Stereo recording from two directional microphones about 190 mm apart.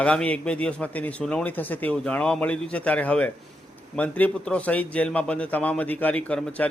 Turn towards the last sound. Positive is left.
turn(degrees=5)  # may be behind; listen again after turning